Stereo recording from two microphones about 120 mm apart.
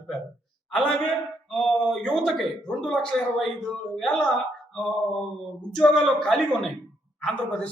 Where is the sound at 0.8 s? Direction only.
5° left (ahead or behind).